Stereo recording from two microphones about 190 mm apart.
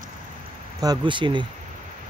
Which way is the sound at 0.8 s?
25° right (ahead or behind).